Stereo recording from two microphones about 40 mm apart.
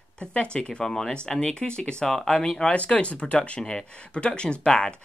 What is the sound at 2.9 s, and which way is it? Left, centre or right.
Speech, left.